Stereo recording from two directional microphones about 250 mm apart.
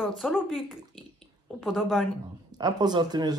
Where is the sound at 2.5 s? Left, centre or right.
Centre.